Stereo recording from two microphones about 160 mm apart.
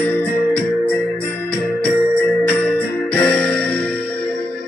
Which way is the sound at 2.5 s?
10° left (ahead or behind).